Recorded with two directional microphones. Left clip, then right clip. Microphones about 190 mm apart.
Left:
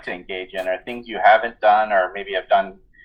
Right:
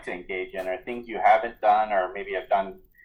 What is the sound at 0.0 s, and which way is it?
Speech, 30° left (ahead or behind).